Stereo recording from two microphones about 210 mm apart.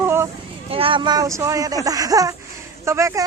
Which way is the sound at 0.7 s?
25° right (ahead or behind).